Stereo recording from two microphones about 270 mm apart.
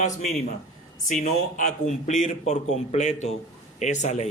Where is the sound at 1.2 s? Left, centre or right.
Left.